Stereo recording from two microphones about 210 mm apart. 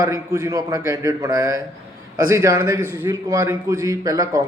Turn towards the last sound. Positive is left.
turn(degrees=-15)  # may be behind; listen again after turning